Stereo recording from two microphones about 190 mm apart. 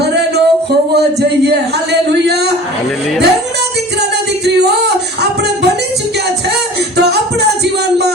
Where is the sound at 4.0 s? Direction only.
60° right (ahead or behind).